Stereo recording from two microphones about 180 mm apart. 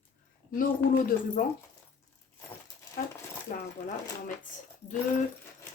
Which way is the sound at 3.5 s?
55° left (ahead or behind).